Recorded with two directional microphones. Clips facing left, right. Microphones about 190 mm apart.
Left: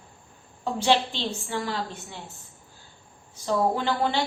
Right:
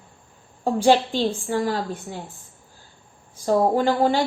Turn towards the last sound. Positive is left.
turn(degrees=-45)  # may be behind; listen again after turning